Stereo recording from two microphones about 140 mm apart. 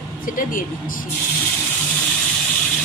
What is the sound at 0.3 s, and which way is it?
Speech, 75° left (ahead or behind).